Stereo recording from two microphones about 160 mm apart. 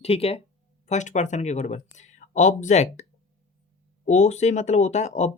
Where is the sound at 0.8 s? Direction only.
50° left (ahead or behind).